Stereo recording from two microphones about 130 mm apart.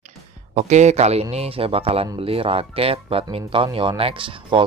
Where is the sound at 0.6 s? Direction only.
60° right (ahead or behind).